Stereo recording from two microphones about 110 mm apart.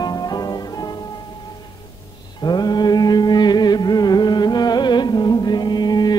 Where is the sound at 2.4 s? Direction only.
40° left (ahead or behind).